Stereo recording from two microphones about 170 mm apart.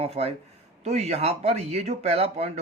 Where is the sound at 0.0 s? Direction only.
35° right (ahead or behind).